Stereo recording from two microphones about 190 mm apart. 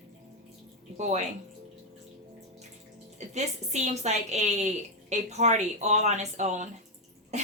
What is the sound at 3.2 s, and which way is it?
A woman's voice, 35° right (ahead or behind).